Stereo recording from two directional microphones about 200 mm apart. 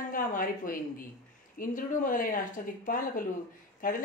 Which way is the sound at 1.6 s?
40° left (ahead or behind).